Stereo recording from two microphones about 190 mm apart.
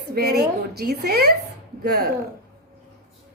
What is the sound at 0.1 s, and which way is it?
A woman's voice, 55° right (ahead or behind).